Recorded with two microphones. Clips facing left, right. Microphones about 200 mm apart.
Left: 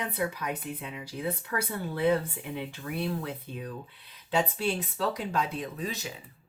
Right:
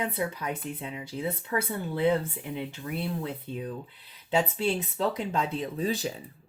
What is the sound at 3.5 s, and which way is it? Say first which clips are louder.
Speech: right 3 dB; 25° right (ahead or behind).